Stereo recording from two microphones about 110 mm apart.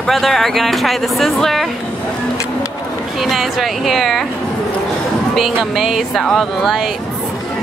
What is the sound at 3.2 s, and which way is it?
Speech, centre (ahead or behind).